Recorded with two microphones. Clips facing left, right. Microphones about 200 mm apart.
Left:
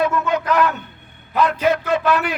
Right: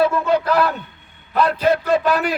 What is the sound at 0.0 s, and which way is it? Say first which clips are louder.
A man's voice: right 3 dB; 30° right (ahead or behind).